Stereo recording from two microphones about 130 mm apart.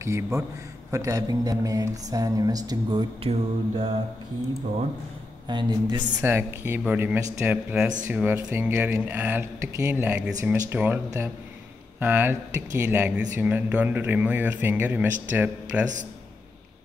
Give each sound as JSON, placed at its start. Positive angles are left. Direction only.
{"t": 0.0, "sound": "mantra", "side_deg": -20}
{"t": 3.3, "sound": "mantra", "side_deg": -40}
{"t": 5.5, "sound": "mantra", "side_deg": -35}
{"t": 6.2, "sound": "speech", "side_deg": -15}
{"t": 12.0, "sound": "speech", "side_deg": -15}